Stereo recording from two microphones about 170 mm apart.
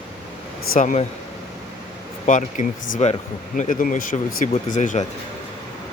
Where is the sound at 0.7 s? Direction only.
50° left (ahead or behind).